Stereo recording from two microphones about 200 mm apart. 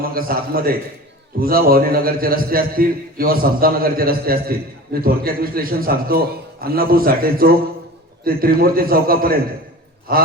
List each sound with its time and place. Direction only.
0.0 s a man's voice: 45° right (ahead or behind)